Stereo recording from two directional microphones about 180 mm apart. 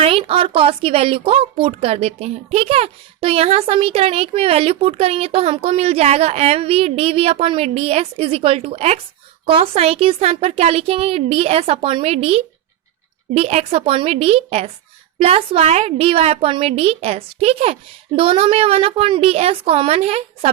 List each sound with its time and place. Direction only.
0.0 s a woman's voice: 30° right (ahead or behind)